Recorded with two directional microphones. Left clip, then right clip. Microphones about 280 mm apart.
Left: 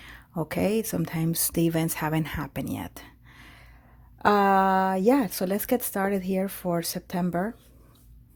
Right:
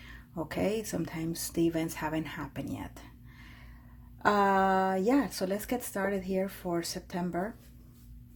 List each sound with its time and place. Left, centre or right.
0.0 s speech: left